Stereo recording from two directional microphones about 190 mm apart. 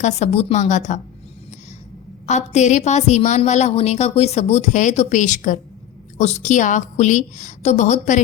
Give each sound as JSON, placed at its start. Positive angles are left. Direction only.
{"t": 0.0, "sound": "a woman's voice", "side_deg": 35}
{"t": 2.2, "sound": "a woman's voice", "side_deg": 40}